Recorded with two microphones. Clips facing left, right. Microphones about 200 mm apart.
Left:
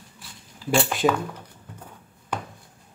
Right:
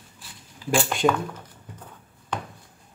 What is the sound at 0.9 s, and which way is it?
Speech, centre (ahead or behind).